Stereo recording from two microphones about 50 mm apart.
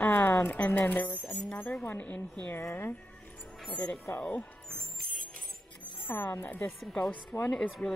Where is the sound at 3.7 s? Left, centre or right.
Left.